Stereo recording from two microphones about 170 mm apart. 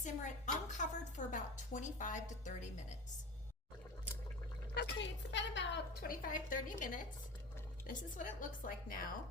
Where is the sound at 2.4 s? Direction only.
45° left (ahead or behind).